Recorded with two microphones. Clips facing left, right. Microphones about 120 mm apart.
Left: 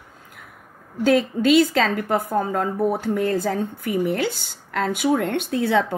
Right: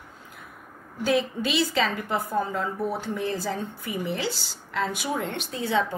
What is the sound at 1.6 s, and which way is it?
A woman's voice, 50° left (ahead or behind).